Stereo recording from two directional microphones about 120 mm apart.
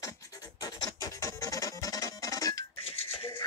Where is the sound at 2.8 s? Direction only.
55° left (ahead or behind).